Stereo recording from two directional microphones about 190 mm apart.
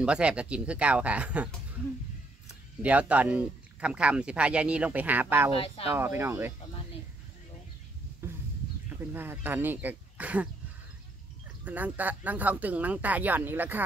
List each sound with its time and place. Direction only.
0.0 s speech: 5° right (ahead or behind)
2.8 s speech: 5° right (ahead or behind)
5.5 s speech: 30° left (ahead or behind)
5.9 s speech: 10° right (ahead or behind)
8.2 s a sound: 15° right (ahead or behind)
8.8 s speech: 10° right (ahead or behind)
11.6 s speech: 10° right (ahead or behind)